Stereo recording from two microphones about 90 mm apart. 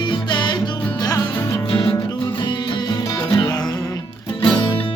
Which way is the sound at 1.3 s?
30° left (ahead or behind).